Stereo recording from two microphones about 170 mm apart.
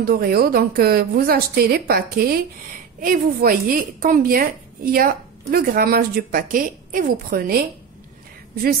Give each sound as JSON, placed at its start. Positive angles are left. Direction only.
{"t": 0.0, "sound": "a woman's voice", "side_deg": -65}